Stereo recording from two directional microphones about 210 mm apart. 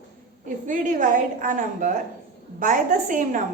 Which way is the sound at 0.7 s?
40° right (ahead or behind).